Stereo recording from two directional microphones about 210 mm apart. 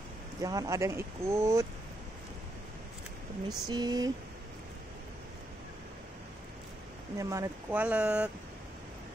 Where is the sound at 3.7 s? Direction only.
20° right (ahead or behind).